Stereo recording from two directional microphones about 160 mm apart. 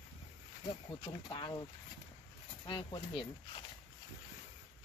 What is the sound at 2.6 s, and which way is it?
Speech, 30° left (ahead or behind).